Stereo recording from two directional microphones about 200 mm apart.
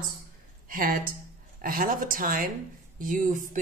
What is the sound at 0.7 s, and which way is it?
A woman's voice, 45° right (ahead or behind).